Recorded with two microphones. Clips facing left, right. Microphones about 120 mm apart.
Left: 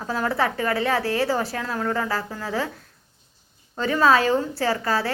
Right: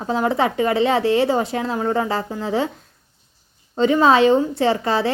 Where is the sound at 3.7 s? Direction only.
20° right (ahead or behind).